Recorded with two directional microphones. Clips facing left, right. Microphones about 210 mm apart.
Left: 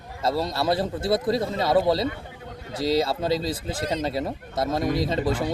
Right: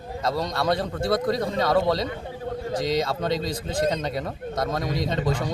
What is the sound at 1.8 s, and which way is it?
Speech, 5° left (ahead or behind).